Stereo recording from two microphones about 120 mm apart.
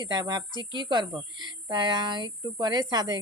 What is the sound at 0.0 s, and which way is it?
A woman's voice, 35° right (ahead or behind).